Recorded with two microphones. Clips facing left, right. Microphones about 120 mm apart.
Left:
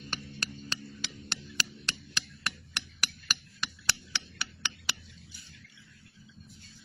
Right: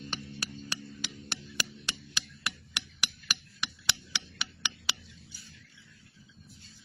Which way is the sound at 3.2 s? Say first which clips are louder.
Even; 15° right (ahead or behind).